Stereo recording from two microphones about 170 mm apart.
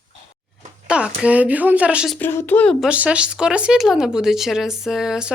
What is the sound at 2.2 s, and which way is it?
Speech, 10° left (ahead or behind).